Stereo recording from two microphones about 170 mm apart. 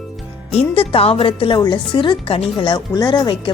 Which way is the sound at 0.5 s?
35° left (ahead or behind).